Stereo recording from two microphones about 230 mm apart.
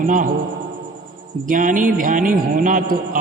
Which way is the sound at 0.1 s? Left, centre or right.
Right.